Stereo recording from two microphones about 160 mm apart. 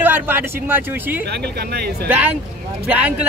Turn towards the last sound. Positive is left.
turn(degrees=-10)  # may be behind; listen again after turning